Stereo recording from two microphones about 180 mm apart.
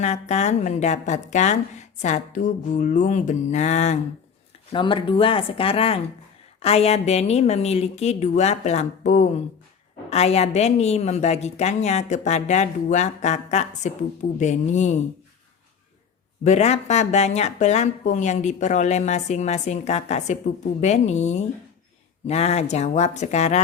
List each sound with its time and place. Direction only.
0.0 s speech: 40° left (ahead or behind)
4.7 s speech: 25° left (ahead or behind)
16.4 s speech: 40° left (ahead or behind)